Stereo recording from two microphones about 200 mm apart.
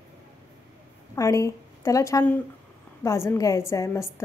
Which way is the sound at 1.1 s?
15° left (ahead or behind).